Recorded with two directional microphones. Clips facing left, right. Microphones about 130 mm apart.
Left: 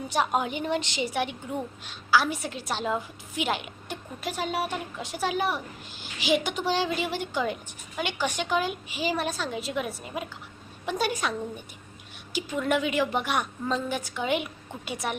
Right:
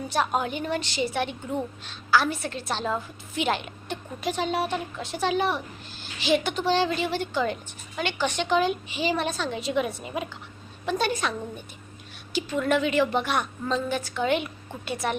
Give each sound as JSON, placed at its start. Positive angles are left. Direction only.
{"t": 0.1, "sound": "a woman's voice", "side_deg": 15}
{"t": 10.8, "sound": "a woman's voice", "side_deg": 10}